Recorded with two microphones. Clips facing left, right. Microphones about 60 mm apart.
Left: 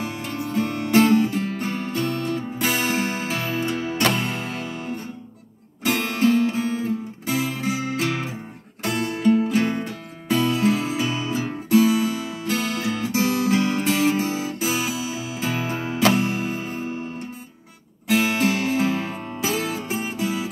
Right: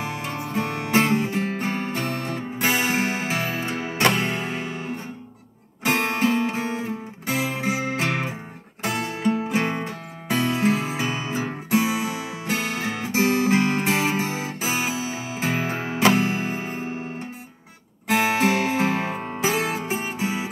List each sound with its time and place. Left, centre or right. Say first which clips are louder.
0.0 s music: left 1 dB; right
18.0 s music: even; right